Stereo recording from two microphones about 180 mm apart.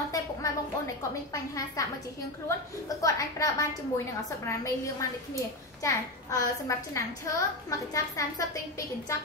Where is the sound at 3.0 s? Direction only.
20° left (ahead or behind).